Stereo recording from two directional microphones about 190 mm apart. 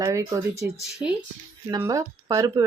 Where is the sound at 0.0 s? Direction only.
15° right (ahead or behind).